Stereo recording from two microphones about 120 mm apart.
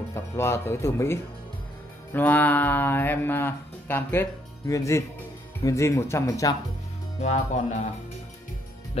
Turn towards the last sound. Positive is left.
turn(degrees=75)  # may be behind; listen again after turning